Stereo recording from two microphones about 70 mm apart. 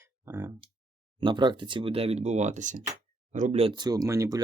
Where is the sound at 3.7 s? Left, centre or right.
Right.